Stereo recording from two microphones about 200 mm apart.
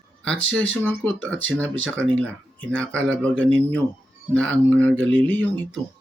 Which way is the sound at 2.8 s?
5° left (ahead or behind).